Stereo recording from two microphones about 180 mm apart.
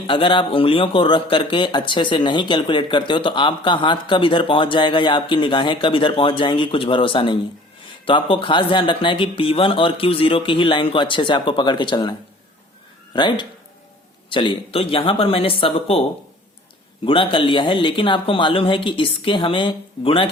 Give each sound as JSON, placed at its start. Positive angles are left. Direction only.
{"t": 0.1, "sound": "speech", "side_deg": 30}
{"t": 13.1, "sound": "speech", "side_deg": 25}
{"t": 17.1, "sound": "speech", "side_deg": 30}